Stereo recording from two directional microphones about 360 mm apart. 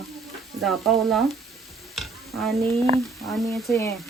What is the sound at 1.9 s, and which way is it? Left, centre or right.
Stir, centre.